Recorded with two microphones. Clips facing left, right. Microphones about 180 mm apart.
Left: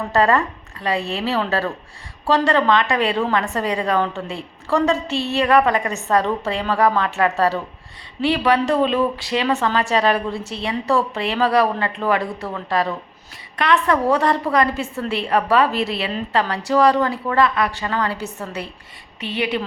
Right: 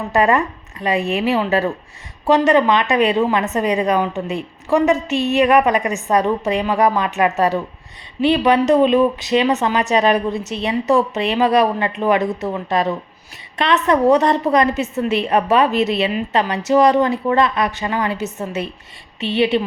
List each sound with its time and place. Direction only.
0.1 s a woman's voice: 15° right (ahead or behind)